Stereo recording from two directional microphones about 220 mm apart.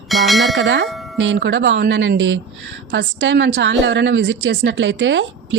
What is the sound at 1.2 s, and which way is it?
Speech, 55° right (ahead or behind).